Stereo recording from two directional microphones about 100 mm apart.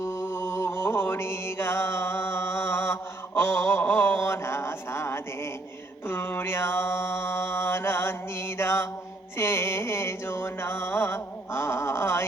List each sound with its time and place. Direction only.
0.0 s mantra: 30° left (ahead or behind)